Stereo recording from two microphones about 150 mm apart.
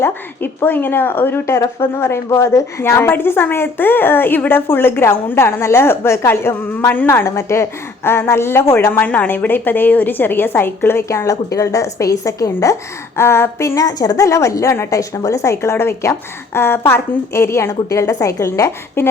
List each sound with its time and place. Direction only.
0.0 s a woman's voice: 15° left (ahead or behind)